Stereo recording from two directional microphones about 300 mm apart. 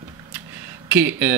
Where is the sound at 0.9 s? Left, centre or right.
Centre.